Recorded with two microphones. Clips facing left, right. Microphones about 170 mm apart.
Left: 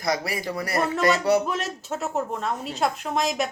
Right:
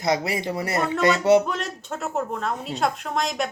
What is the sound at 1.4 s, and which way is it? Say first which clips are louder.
A woman's voice: left 1 dB; centre (ahead or behind).